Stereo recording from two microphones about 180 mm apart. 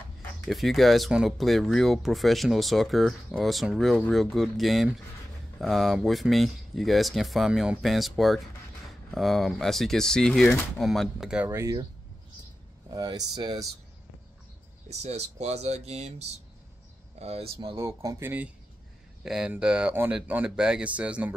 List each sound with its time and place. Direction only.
0.5 s speech: centre (ahead or behind); by 11.8 s 15° right (ahead or behind)
12.9 s speech: 20° right (ahead or behind)
14.9 s speech: 35° right (ahead or behind)
17.7 s speech: 15° right (ahead or behind)